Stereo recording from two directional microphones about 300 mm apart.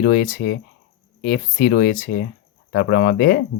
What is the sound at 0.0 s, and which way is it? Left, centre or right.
Speech, left.